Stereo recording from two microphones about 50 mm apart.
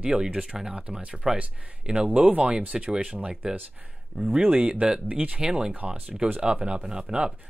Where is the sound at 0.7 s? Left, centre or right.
Right.